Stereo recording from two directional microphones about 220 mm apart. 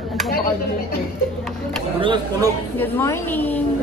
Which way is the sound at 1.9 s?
20° right (ahead or behind).